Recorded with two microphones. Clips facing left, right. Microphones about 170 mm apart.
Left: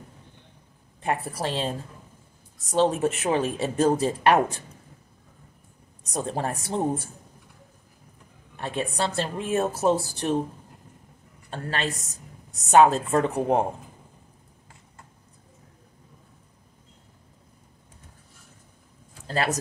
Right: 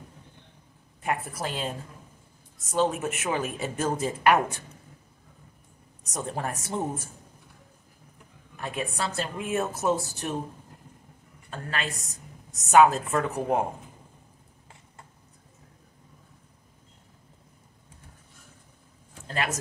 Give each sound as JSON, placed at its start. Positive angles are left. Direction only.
{"t": 1.0, "sound": "a woman's voice", "side_deg": 30}
{"t": 6.0, "sound": "speech", "side_deg": 30}
{"t": 8.5, "sound": "speech", "side_deg": 30}
{"t": 11.5, "sound": "a woman's voice", "side_deg": 30}
{"t": 19.2, "sound": "speech", "side_deg": 35}